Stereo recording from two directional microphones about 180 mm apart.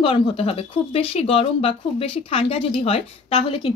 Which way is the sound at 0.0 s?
30° left (ahead or behind).